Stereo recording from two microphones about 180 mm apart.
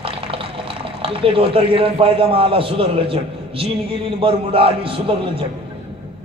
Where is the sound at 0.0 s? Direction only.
30° right (ahead or behind).